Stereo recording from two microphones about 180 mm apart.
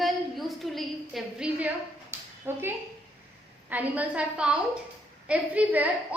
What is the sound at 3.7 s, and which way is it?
A woman's voice, 10° right (ahead or behind).